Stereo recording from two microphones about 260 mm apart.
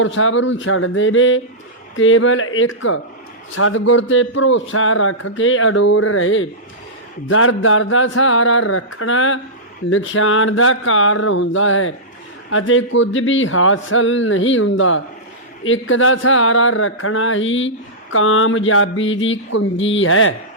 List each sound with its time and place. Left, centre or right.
0.0 s speech: left